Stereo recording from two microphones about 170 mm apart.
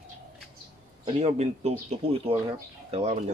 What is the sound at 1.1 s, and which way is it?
Speech, 40° right (ahead or behind).